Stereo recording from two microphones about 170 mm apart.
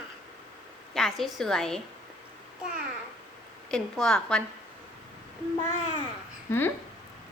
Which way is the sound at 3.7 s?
5° left (ahead or behind).